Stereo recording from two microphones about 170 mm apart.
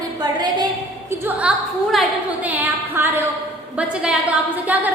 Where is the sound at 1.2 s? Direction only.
5° right (ahead or behind).